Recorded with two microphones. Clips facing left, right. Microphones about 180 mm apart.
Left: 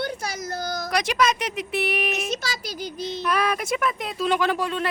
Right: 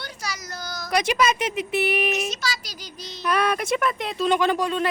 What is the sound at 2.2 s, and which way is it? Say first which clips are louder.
Child singing: left 1 dB; 55° left (ahead or behind).